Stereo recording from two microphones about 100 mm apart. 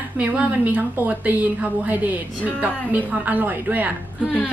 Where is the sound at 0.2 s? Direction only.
15° right (ahead or behind).